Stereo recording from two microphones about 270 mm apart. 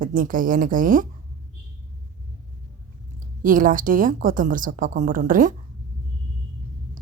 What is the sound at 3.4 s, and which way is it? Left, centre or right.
A woman's voice, right.